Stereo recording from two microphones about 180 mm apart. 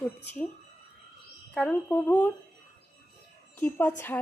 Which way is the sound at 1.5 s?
5° left (ahead or behind).